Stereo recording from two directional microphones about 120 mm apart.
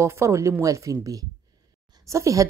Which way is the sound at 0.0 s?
25° right (ahead or behind).